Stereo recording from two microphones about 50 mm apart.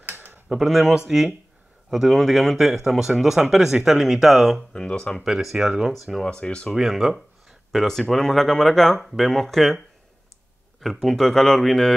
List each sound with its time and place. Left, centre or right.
0.1 s a sound: right
0.5 s speech: centre
4.7 s speech: centre
5.2 s speech: centre
6.2 s speech: left
6.7 s speech: centre
10.8 s speech: centre